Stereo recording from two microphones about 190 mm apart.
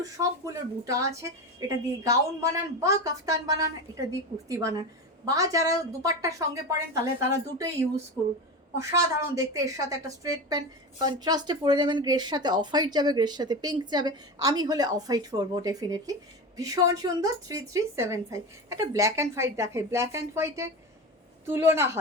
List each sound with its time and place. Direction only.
0.0 s a woman's voice: 15° right (ahead or behind)
8.8 s a woman's voice: 15° right (ahead or behind)